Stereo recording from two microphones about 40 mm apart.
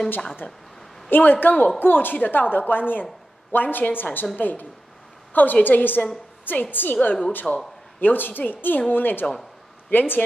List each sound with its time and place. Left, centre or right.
0.4 s a woman's voice: left
1.8 s a woman's voice: left
2.1 s a woman's voice: left
2.5 s a woman's voice: left